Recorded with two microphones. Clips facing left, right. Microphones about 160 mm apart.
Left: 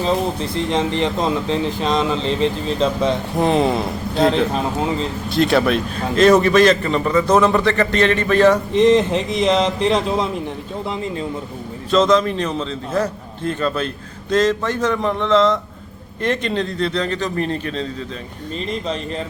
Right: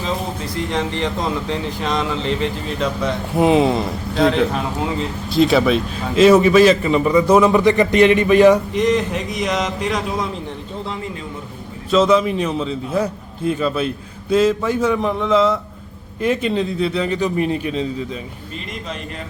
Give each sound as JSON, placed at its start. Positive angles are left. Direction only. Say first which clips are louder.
{"t": 0.0, "sound": "speech", "louder": "left 5 dB", "side_deg": 25}
{"t": 3.3, "sound": "a man's voice", "louder": "right 4 dB", "side_deg": -5}
{"t": 8.7, "sound": "speech", "louder": "left 4 dB", "side_deg": 25}
{"t": 11.9, "sound": "a man's voice", "louder": "right 1 dB", "side_deg": -5}